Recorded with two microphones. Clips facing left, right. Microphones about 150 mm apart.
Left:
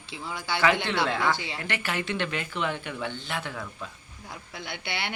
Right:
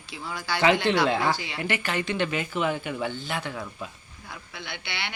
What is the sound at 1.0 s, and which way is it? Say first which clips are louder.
Speech: right 2 dB; 20° right (ahead or behind).